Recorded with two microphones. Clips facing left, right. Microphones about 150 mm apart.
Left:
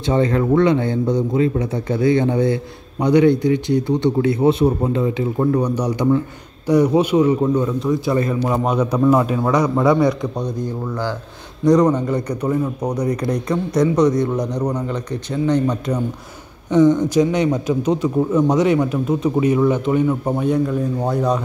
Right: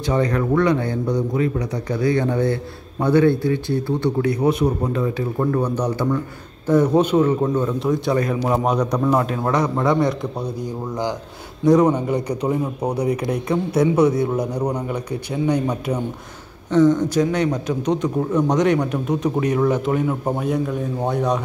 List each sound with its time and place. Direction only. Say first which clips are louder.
0.0 s a man's voice: left 3 dB; 25° left (ahead or behind)
7.6 s a man's voice: left 1 dB; centre (ahead or behind)
10.6 s a man's voice: left 1 dB; 15° right (ahead or behind)
11.6 s a man's voice: left 1 dB; 5° right (ahead or behind)
16.7 s a man's voice: left 2 dB; 15° left (ahead or behind)